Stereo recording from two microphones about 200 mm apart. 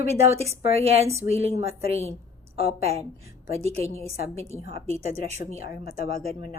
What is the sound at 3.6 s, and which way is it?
Speech, 30° right (ahead or behind).